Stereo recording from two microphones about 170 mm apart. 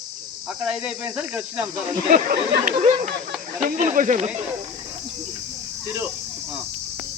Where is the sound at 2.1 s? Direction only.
55° right (ahead or behind).